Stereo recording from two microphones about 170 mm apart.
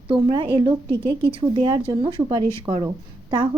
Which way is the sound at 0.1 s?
30° right (ahead or behind).